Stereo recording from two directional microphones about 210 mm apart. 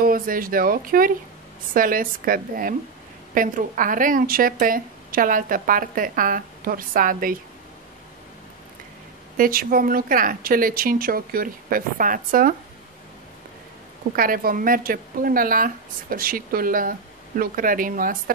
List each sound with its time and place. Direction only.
0.0 s a woman's voice: 40° right (ahead or behind)
9.4 s speech: 45° right (ahead or behind)
14.1 s a woman's voice: 40° right (ahead or behind)